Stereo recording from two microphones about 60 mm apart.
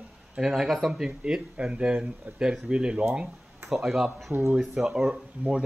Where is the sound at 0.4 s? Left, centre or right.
Centre.